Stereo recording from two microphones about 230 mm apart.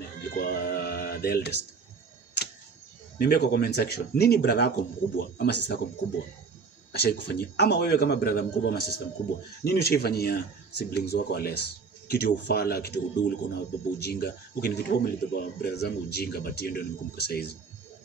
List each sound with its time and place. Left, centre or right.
0.4 s music: left
3.2 s speech: left
6.9 s speech: left